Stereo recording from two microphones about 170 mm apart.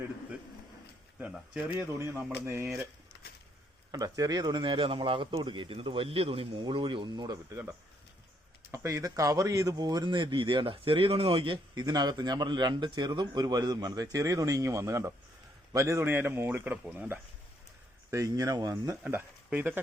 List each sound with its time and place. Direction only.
1.2 s speech: 10° right (ahead or behind)
3.9 s speech: 20° right (ahead or behind)
8.7 s speech: 20° right (ahead or behind)
19.0 s speech: 10° right (ahead or behind)